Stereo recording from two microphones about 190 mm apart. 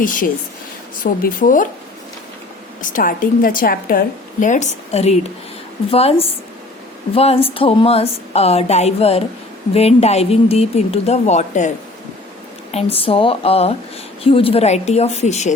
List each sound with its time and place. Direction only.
0.0 s a woman's voice: 45° left (ahead or behind)
2.8 s a woman's voice: 45° left (ahead or behind)
12.7 s a woman's voice: 30° left (ahead or behind)